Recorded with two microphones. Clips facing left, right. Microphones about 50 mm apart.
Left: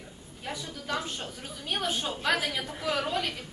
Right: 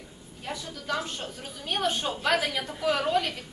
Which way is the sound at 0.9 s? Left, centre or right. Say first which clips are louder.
Right 2 dB; centre.